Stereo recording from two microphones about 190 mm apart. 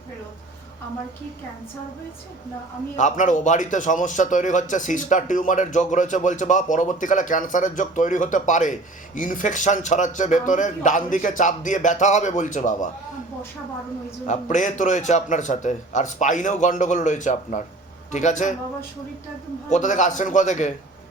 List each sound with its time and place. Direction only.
2.9 s a man's voice: 40° left (ahead or behind)
14.3 s a man's voice: 40° left (ahead or behind)
19.7 s a man's voice: 40° left (ahead or behind)